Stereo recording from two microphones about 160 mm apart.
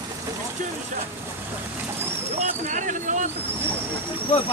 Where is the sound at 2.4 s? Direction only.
50° right (ahead or behind).